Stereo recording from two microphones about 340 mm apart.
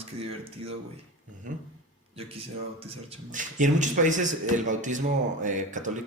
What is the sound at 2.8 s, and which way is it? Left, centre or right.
A man's voice, centre.